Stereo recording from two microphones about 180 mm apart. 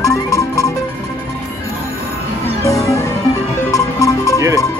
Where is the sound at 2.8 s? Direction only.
15° left (ahead or behind).